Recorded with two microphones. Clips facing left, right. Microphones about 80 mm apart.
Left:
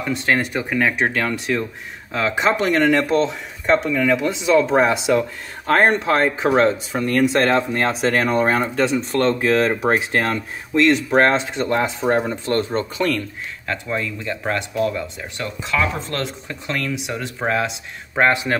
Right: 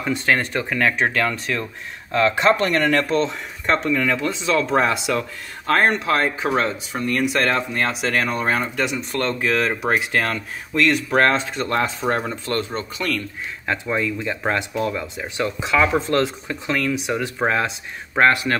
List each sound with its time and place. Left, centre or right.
0.0 s speech: centre
3.2 s speech: centre; by 13.2 s left
13.7 s speech: centre
15.3 s speech: centre
16.4 s speech: centre
17.1 s speech: centre
18.3 s speech: left